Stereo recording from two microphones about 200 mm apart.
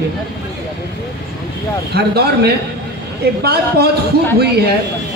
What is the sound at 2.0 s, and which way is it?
A man's voice, 55° right (ahead or behind).